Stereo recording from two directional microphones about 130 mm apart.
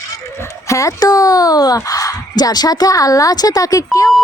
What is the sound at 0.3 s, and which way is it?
Speech, 20° left (ahead or behind).